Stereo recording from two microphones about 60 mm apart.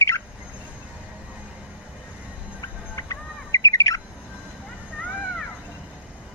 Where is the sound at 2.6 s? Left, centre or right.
Left.